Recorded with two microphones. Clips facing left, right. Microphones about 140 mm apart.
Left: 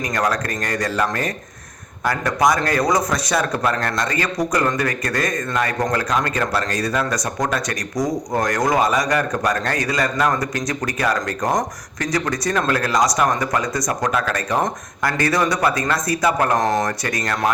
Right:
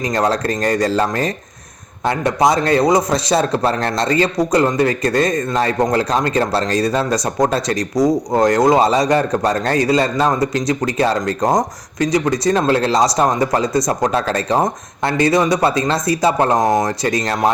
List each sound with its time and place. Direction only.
0.0 s speech: 25° right (ahead or behind)
16.6 s speech: 15° right (ahead or behind)
16.8 s speech: 25° right (ahead or behind)